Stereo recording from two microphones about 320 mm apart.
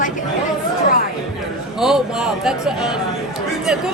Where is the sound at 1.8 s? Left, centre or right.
Centre.